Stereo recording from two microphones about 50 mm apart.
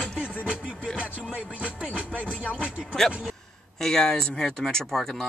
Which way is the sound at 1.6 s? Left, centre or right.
Right.